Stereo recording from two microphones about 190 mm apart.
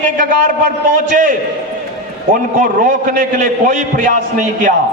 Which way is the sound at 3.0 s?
45° right (ahead or behind).